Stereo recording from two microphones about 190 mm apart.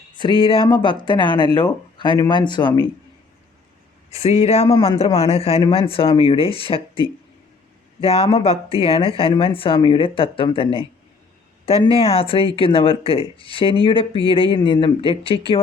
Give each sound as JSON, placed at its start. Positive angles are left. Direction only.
{"t": 0.2, "sound": "speech", "side_deg": 25}
{"t": 4.2, "sound": "speech", "side_deg": 30}
{"t": 8.0, "sound": "speech", "side_deg": 30}